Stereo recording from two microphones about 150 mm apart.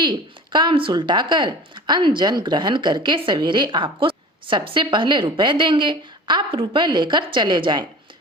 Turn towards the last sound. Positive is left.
turn(degrees=-30)  # may be behind; listen again after turning